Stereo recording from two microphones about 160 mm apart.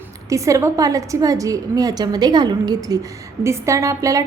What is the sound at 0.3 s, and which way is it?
A woman's voice, 20° right (ahead or behind).